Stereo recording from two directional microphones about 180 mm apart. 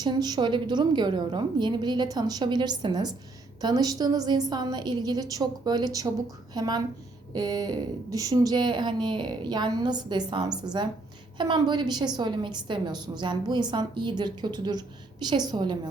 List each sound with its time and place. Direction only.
0.0 s a woman's voice: 25° right (ahead or behind)